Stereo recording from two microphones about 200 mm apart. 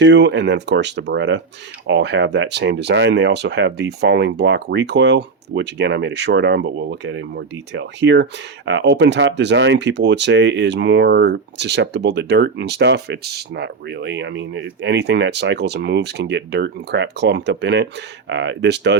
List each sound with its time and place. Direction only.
0.0 s speech: 60° right (ahead or behind)